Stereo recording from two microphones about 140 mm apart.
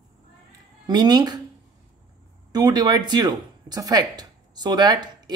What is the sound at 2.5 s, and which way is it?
Speech, 30° right (ahead or behind).